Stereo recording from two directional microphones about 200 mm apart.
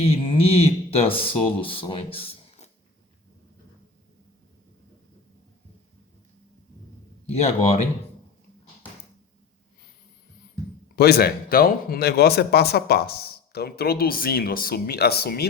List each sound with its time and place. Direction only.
0.0 s speech: 30° left (ahead or behind)
7.3 s speech: 30° left (ahead or behind)
10.9 s speech: 50° left (ahead or behind)